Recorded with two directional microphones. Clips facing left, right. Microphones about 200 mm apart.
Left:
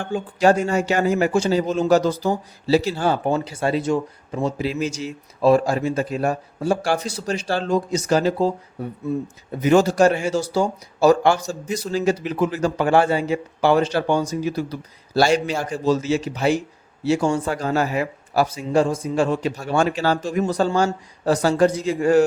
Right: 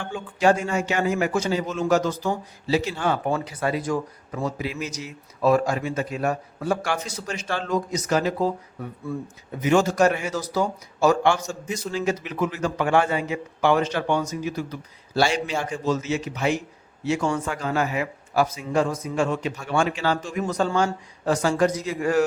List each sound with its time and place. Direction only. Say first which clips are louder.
0.0 s a man's voice: left 3 dB; 40° left (ahead or behind)